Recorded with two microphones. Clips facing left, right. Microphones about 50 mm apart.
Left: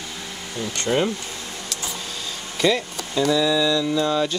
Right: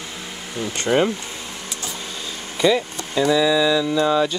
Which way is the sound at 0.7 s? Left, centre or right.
Centre.